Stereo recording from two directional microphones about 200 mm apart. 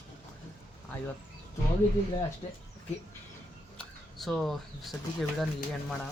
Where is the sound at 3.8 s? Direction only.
Centre (ahead or behind).